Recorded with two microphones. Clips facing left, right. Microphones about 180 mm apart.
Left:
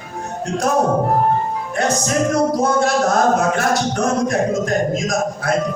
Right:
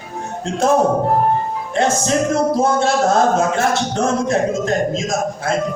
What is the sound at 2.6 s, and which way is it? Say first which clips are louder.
A man's voice: right 1 dB; 25° right (ahead or behind).